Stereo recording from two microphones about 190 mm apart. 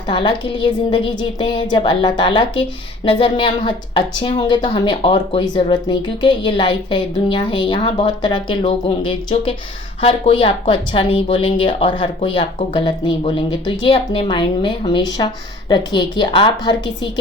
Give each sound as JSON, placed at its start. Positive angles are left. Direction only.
{"t": 0.1, "sound": "a woman's voice", "side_deg": 25}